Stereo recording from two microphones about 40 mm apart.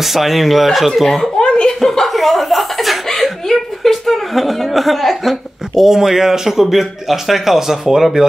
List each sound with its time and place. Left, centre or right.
0.0 s speech: centre
1.4 s chuckle: left
1.8 s chuckle: centre
5.9 s a man's voice: centre